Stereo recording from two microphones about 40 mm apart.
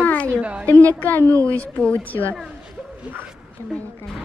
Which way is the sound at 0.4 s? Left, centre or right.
Right.